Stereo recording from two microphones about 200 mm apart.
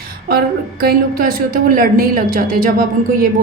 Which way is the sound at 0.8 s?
50° right (ahead or behind).